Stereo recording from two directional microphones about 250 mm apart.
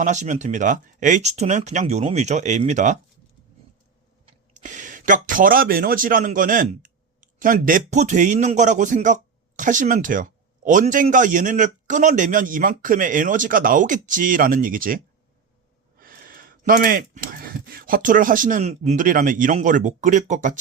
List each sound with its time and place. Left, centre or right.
0.0 s speech: right
4.5 s speech: right